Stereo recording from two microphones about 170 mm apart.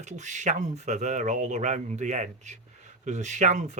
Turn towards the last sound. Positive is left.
turn(degrees=-45)  # may be behind; listen again after turning